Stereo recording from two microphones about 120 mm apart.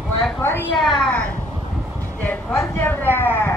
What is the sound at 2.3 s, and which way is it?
A woman's voice, 15° left (ahead or behind).